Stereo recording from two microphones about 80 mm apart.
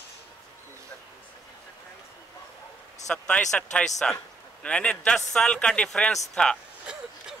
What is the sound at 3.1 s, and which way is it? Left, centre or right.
A man's voice, centre.